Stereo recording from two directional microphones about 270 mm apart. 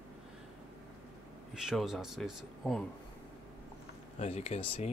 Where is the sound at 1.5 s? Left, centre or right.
Centre.